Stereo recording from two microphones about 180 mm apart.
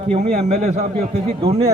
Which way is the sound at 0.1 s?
35° right (ahead or behind).